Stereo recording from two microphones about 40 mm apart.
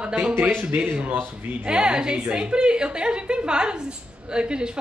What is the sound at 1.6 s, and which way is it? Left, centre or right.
A woman's voice, right.